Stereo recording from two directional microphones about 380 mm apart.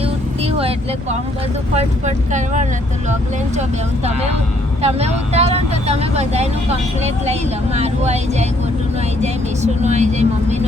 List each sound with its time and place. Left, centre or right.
0.0 s vehicle: centre
1.7 s speech: centre
4.8 s speech: centre